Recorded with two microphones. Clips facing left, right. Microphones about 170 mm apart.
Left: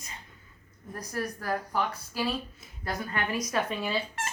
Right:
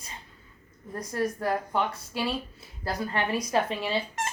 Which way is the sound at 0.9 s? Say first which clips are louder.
Right 5 dB; 25° right (ahead or behind).